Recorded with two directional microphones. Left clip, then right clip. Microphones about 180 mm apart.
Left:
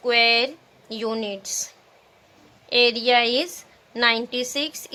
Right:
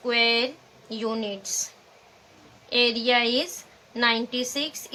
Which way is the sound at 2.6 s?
55° left (ahead or behind).